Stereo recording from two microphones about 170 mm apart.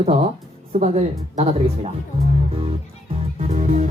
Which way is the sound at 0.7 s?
40° right (ahead or behind).